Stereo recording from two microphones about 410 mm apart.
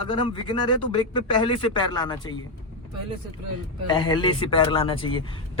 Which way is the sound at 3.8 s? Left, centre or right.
Centre.